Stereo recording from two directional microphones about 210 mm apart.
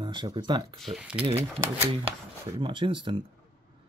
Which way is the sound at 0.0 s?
20° right (ahead or behind).